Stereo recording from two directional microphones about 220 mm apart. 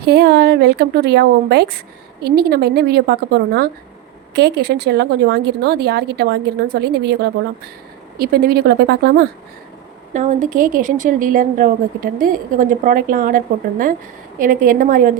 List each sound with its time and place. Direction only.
0.0 s speech: 50° right (ahead or behind)
10.1 s a woman's voice: 35° right (ahead or behind)